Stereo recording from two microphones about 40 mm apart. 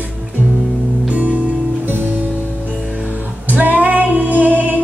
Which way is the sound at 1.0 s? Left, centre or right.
Right.